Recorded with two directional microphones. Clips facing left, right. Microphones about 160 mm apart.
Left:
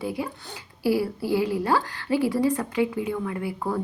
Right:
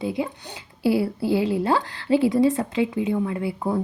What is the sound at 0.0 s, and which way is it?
A woman's voice, 25° right (ahead or behind).